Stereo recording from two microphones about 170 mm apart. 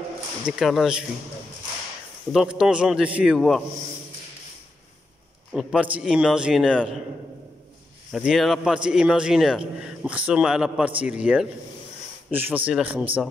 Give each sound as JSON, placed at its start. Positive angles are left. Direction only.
{"t": 0.5, "sound": "a man's voice", "side_deg": 0}
{"t": 2.3, "sound": "a man's voice", "side_deg": -5}
{"t": 5.5, "sound": "a man's voice", "side_deg": -5}
{"t": 8.1, "sound": "a man's voice", "side_deg": 0}